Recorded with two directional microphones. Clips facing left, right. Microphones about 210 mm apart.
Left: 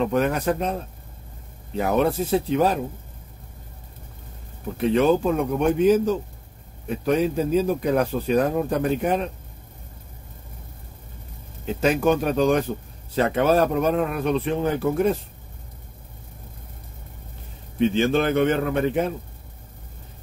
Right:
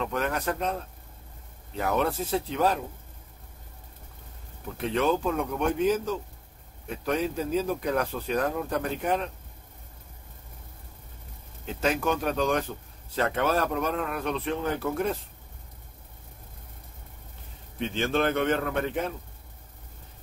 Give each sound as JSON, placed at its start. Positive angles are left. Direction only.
{"t": 0.0, "sound": "speech", "side_deg": 15}
{"t": 1.8, "sound": "speech", "side_deg": 15}
{"t": 4.8, "sound": "speech", "side_deg": 15}
{"t": 11.6, "sound": "speech", "side_deg": 15}
{"t": 17.7, "sound": "speech", "side_deg": 10}